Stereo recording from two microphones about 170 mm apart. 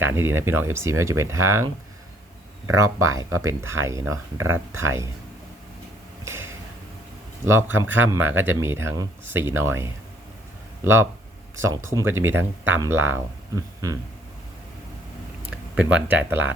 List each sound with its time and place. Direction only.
0.0 s speech: 15° right (ahead or behind)
6.2 s a sound: 15° right (ahead or behind)
7.4 s speech: 15° right (ahead or behind)
11.5 s speech: 15° right (ahead or behind)
15.4 s speech: 5° right (ahead or behind)